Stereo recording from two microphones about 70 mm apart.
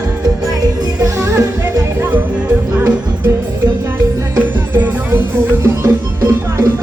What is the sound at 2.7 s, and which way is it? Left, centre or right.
Music, right.